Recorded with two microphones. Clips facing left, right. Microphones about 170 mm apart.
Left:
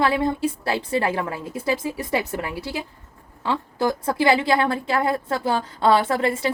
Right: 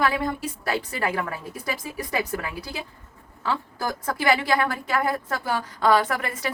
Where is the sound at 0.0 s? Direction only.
25° left (ahead or behind).